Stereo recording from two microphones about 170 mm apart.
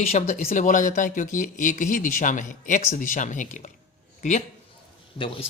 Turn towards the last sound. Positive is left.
turn(degrees=30)  # may be behind; listen again after turning